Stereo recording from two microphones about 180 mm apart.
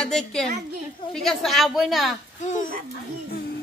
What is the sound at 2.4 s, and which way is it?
Speech, 40° left (ahead or behind).